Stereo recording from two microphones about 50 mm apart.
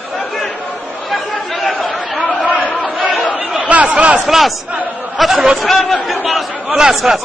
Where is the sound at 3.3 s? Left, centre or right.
Right.